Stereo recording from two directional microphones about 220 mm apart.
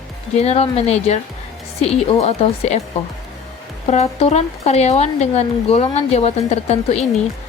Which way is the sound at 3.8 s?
30° left (ahead or behind).